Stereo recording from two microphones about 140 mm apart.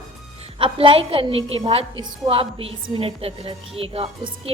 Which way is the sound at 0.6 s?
40° right (ahead or behind).